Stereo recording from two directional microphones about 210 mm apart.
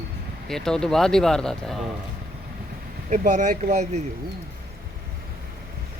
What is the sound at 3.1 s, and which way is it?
Speech, 35° right (ahead or behind).